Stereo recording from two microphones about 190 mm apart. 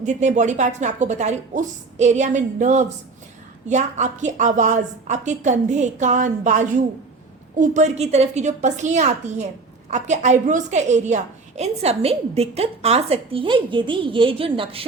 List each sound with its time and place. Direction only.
0.0 s a woman's voice: 40° right (ahead or behind)